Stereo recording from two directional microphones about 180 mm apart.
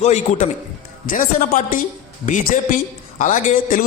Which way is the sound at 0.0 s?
40° left (ahead or behind).